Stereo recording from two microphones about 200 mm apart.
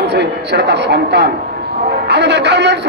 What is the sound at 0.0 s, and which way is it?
A man's voice, 60° right (ahead or behind).